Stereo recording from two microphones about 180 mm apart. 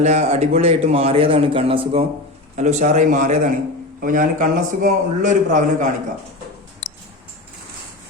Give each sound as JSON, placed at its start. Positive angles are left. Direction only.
{"t": 0.0, "sound": "a man's voice", "side_deg": -40}
{"t": 2.6, "sound": "a man's voice", "side_deg": -40}